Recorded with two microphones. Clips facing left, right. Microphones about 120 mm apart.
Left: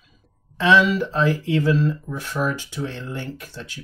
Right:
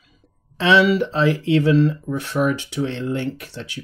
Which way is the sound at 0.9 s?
70° right (ahead or behind).